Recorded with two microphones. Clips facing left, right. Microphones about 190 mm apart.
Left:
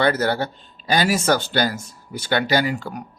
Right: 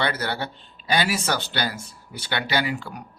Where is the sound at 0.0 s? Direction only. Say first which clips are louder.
Left 7 dB; 45° left (ahead or behind).